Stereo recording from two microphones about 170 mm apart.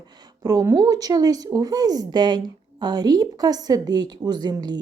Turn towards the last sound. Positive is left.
turn(degrees=-25)  # may be behind; listen again after turning